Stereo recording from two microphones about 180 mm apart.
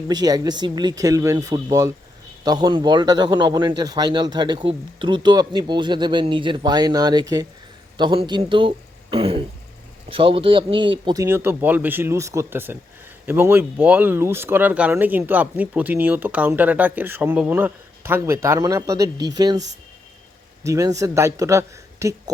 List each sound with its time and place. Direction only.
0.1 s speech: 20° right (ahead or behind)
20.7 s speech: 15° right (ahead or behind)